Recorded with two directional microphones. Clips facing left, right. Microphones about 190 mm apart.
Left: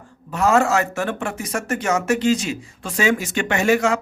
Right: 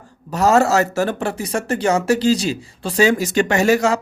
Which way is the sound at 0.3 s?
40° right (ahead or behind).